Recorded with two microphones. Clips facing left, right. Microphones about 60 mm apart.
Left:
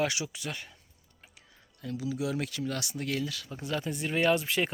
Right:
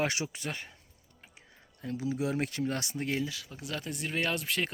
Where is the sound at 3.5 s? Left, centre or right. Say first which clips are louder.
Left 4 dB; centre.